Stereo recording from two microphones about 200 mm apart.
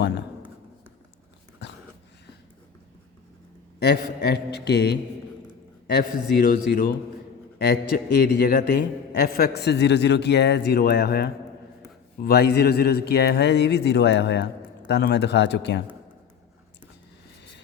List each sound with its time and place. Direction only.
3.8 s mantra: 55° left (ahead or behind)
5.9 s a man's voice: 55° left (ahead or behind)
14.8 s mantra: 55° left (ahead or behind)